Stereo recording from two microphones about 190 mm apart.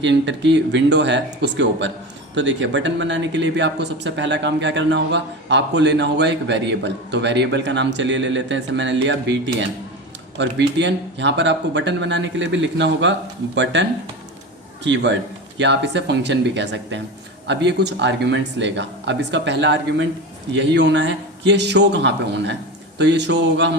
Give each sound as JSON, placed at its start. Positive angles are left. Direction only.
{"t": 0.0, "sound": "speech", "side_deg": -70}
{"t": 14.8, "sound": "speech", "side_deg": -70}